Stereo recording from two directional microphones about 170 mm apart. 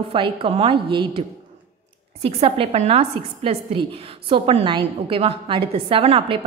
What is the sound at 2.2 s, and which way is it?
A woman's voice, 35° right (ahead or behind).